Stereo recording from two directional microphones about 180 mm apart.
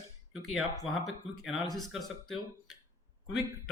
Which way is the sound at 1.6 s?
20° left (ahead or behind).